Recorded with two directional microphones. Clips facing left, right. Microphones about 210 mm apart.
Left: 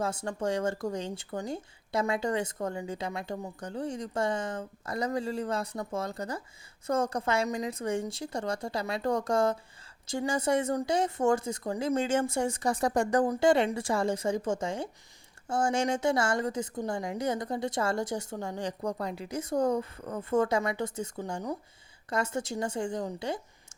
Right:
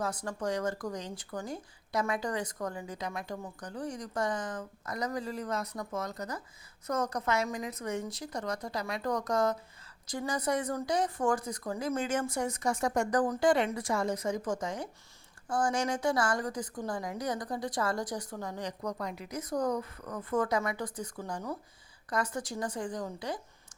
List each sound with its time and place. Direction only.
0.0 s speech: 25° left (ahead or behind)